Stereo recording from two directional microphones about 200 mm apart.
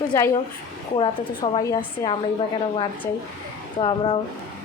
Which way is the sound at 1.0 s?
20° left (ahead or behind).